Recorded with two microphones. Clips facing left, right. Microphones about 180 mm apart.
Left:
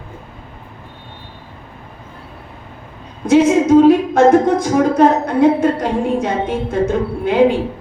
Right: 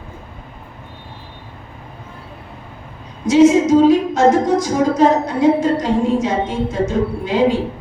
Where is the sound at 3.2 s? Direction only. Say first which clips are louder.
Even; 55° left (ahead or behind).